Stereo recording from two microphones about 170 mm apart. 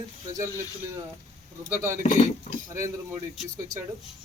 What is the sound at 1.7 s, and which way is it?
Speech, 15° right (ahead or behind).